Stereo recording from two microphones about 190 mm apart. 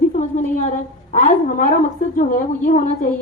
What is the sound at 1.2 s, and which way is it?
A woman's voice, 40° left (ahead or behind).